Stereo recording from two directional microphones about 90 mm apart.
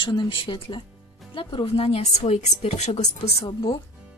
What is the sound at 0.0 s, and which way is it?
Speech, 65° left (ahead or behind).